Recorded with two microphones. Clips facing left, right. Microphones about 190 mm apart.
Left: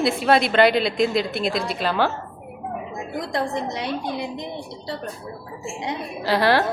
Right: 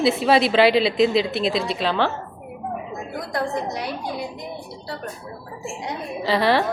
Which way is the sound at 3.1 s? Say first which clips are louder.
Left 1 dB; 20° left (ahead or behind).